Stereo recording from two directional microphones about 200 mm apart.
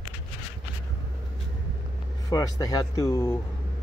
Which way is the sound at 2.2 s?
20° left (ahead or behind).